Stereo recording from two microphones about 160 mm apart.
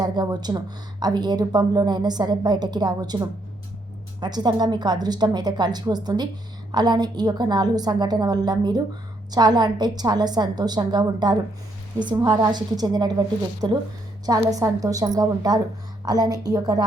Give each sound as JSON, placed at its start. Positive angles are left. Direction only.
{"t": 0.0, "sound": "speech", "side_deg": -25}